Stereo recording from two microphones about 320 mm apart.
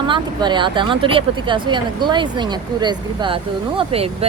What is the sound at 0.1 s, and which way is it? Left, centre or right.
Speech, centre.